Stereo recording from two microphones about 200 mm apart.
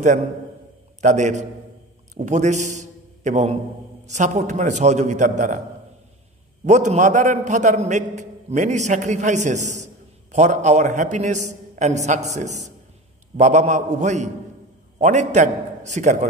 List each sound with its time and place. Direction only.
1.0 s a man's voice: 35° right (ahead or behind)
6.6 s a man's voice: 35° right (ahead or behind)